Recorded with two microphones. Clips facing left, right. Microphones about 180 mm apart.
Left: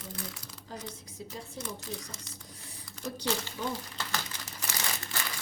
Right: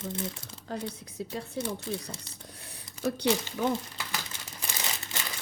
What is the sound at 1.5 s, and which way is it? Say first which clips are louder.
Speech: right 7 dB; 30° right (ahead or behind).